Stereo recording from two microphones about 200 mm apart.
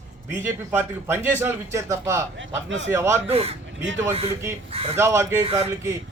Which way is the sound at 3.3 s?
30° right (ahead or behind).